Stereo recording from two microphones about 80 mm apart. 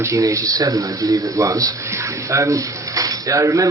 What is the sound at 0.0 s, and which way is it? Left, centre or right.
Speech, right.